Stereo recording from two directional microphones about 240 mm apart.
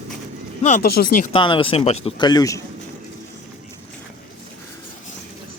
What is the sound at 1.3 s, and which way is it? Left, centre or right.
Speech, left.